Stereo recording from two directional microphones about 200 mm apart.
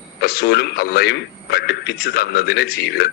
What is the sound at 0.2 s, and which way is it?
A man's voice, 50° left (ahead or behind).